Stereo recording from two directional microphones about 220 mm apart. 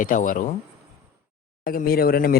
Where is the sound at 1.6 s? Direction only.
40° left (ahead or behind).